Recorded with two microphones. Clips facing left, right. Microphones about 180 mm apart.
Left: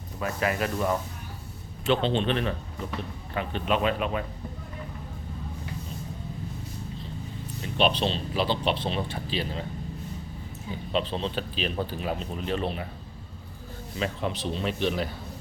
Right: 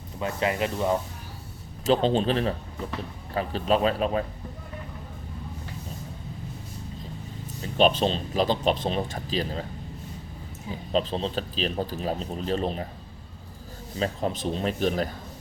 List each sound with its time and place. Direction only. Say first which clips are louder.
0.2 s speech: right 1 dB; 25° right (ahead or behind)
1.9 s speech: right 3 dB; 40° right (ahead or behind)
7.8 s speech: right 3 dB; 40° right (ahead or behind)
10.9 s speech: right 2 dB; 35° right (ahead or behind)
14.0 s speech: right 3 dB; 40° right (ahead or behind)